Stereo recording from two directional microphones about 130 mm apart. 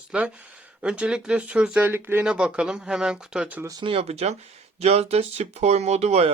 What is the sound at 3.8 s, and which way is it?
Speech, 50° right (ahead or behind).